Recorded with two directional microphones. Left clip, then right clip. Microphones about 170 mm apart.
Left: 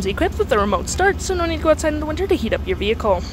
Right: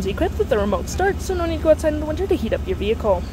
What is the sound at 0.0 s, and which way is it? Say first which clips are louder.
Speech: left 2 dB; centre (ahead or behind).